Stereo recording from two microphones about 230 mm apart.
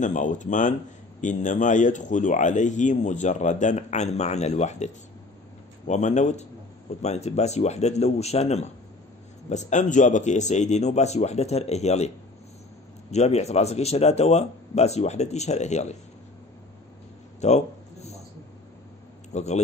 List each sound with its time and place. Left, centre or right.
0.0 s speech: left
13.1 s speech: left
17.4 s a sound: left
19.3 s speech: left